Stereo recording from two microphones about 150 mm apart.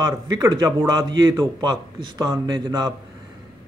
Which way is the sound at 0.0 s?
25° right (ahead or behind).